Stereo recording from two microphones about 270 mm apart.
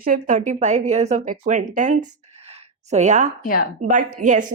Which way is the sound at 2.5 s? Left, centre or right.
Right.